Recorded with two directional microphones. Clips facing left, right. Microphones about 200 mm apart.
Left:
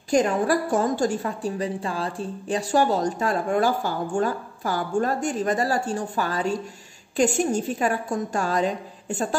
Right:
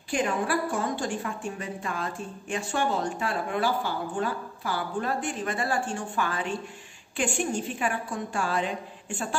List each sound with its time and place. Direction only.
0.1 s a woman's voice: 40° left (ahead or behind)